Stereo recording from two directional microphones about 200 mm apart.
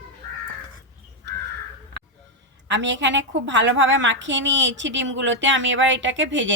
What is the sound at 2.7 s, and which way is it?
A woman's voice, 65° right (ahead or behind).